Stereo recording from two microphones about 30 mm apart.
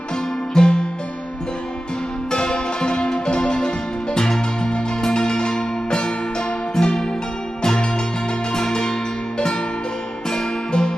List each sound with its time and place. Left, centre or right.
0.5 s music: left
2.3 s music: left
8.5 s music: left
10.7 s music: left